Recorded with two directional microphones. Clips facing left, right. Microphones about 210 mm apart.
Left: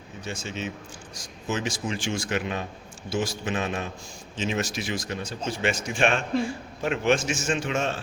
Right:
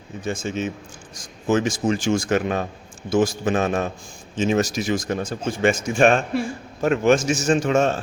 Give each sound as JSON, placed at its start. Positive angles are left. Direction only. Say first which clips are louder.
{"t": 0.2, "sound": "a man's voice", "louder": "right 8 dB", "side_deg": -50}